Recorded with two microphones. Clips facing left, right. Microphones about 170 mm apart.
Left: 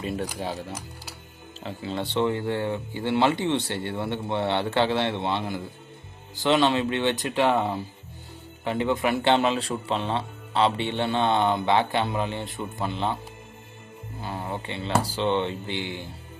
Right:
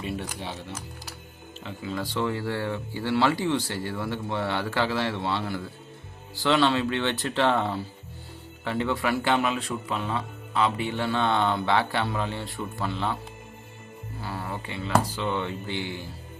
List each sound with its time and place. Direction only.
0.0 s speech: 40° left (ahead or behind)
1.6 s a man's voice: 30° left (ahead or behind)
14.2 s a man's voice: 20° left (ahead or behind)